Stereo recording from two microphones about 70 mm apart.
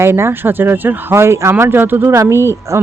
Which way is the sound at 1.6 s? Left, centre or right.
Right.